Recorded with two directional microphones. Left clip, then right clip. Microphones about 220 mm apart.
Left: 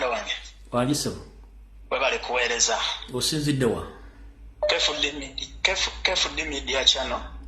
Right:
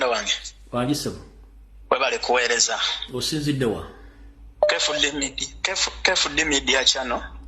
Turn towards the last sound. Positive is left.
turn(degrees=-35)  # may be behind; listen again after turning